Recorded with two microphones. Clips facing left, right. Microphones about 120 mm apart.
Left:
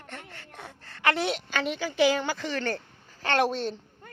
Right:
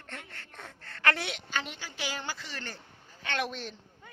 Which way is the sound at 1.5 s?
85° left.